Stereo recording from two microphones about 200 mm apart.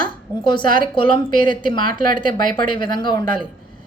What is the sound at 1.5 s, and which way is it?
Speech, 25° left (ahead or behind).